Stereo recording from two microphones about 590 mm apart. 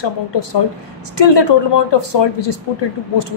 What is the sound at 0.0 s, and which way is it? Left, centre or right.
A woman's voice, left.